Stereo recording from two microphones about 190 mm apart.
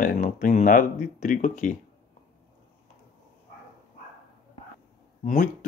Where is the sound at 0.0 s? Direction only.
45° left (ahead or behind).